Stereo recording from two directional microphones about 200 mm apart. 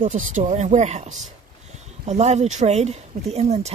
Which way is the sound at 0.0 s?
40° right (ahead or behind).